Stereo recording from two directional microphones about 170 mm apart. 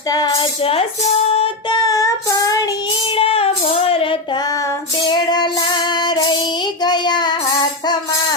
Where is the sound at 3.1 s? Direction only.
35° left (ahead or behind).